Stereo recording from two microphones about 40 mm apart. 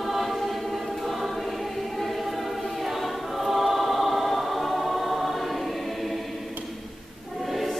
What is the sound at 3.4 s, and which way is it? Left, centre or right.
Choir, centre.